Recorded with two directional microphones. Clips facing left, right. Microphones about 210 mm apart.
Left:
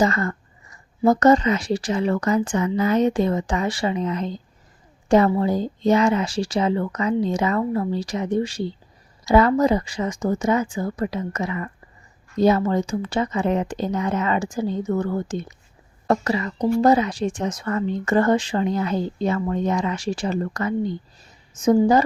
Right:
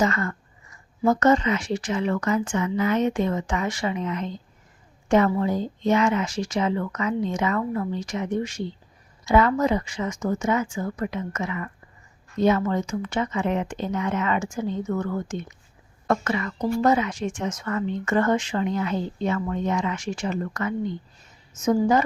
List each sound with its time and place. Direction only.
0.0 s speech: 35° left (ahead or behind)